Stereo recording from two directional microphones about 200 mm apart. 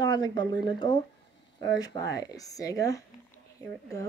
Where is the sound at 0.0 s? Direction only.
20° left (ahead or behind).